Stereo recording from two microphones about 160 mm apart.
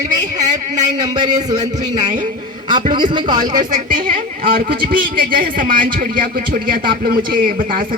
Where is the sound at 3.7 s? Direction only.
65° right (ahead or behind).